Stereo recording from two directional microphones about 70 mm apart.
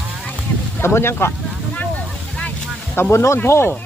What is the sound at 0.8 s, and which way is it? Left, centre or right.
Speech, left.